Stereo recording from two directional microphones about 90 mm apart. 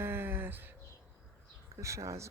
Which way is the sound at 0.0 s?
25° right (ahead or behind).